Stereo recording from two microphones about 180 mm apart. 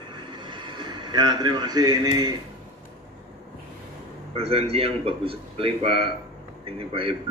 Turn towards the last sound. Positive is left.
turn(degrees=-30)  # may be behind; listen again after turning